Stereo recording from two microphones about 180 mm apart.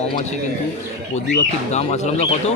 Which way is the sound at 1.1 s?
40° left (ahead or behind).